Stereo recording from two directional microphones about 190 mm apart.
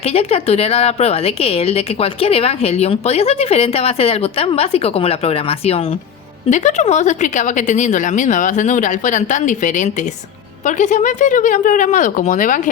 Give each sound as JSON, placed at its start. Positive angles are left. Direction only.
{"t": 0.1, "sound": "a woman's voice", "side_deg": 30}